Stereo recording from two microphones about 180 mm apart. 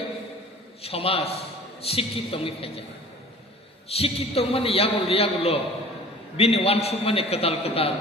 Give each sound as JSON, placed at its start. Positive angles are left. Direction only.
{"t": 0.8, "sound": "a man's voice", "side_deg": 35}
{"t": 3.9, "sound": "a man's voice", "side_deg": 35}